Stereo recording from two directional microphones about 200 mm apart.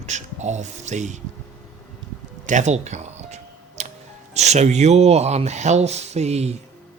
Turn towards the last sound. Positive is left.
turn(degrees=-35)  # may be behind; listen again after turning